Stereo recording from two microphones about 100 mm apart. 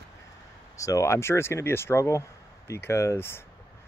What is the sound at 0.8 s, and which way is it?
Speech, 30° left (ahead or behind).